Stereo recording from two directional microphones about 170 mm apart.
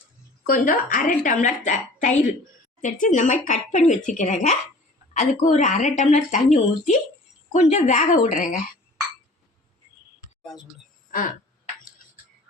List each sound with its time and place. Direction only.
0.4 s a woman's voice: 55° left (ahead or behind)